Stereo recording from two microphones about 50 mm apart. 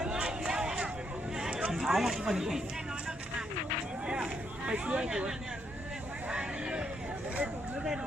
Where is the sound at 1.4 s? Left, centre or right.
Centre.